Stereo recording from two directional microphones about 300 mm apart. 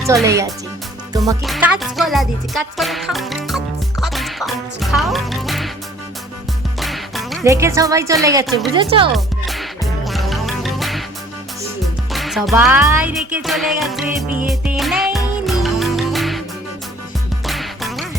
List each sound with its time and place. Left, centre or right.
0.0 s a woman's voice: centre
1.4 s music: centre
6.7 s music: centre
7.4 s a woman's voice: centre
9.1 s music: centre
12.1 s music: centre
17.4 s music: centre